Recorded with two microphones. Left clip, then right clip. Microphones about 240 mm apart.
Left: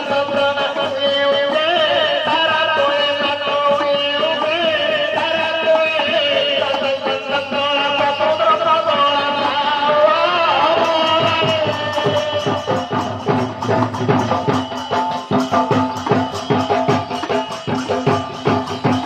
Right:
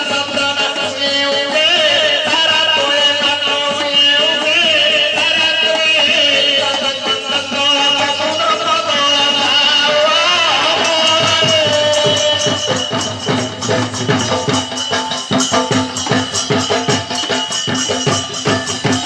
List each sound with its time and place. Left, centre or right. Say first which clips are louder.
7.7 s music: right 4 dB; right